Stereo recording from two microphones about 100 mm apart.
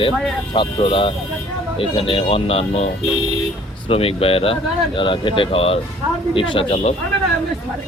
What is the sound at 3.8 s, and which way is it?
Speech, 70° left (ahead or behind).